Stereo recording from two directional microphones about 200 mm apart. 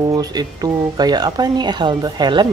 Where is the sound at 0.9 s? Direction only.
20° right (ahead or behind).